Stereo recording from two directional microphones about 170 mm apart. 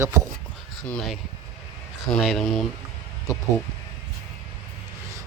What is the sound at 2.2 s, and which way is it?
Speech, centre (ahead or behind).